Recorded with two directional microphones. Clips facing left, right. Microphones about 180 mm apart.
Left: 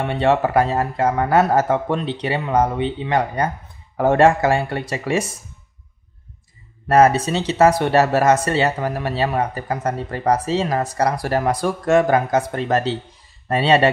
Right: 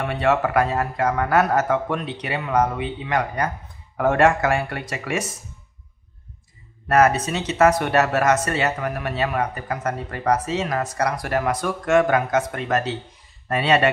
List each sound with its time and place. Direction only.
0.0 s speech: 30° left (ahead or behind)
6.9 s speech: 30° left (ahead or behind)